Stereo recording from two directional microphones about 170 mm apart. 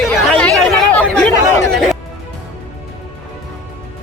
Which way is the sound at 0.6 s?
5° left (ahead or behind).